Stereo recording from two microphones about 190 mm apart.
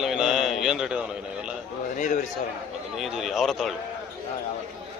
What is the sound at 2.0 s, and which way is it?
Speech, 40° left (ahead or behind).